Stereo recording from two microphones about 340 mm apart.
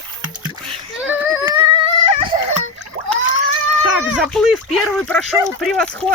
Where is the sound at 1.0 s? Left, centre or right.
Centre.